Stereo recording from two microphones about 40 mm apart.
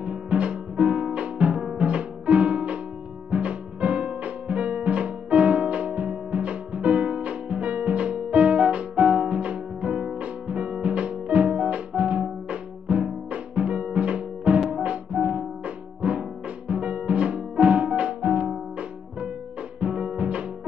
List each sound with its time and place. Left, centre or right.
0.0 s music: right
9.3 s music: right
19.8 s music: right